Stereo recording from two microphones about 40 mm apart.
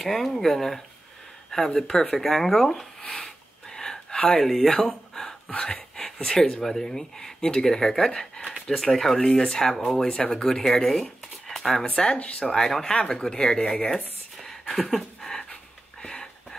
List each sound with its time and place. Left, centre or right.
0.0 s speech: centre
3.0 s speech: left
3.3 s gasp: centre
4.4 s speech: centre
11.8 s speech: left
13.3 s speech: left
13.8 s a sound: centre
16.0 s a sound: left